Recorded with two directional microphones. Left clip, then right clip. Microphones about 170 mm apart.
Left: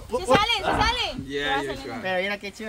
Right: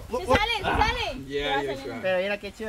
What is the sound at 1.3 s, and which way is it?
Speech, 15° left (ahead or behind).